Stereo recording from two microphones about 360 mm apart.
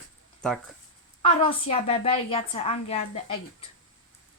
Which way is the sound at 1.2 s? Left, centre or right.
Centre.